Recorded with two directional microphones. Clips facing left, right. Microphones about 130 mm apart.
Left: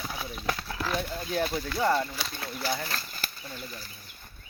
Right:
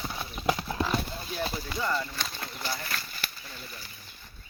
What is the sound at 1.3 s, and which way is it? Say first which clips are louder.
Speech: left 5 dB; 50° left (ahead or behind).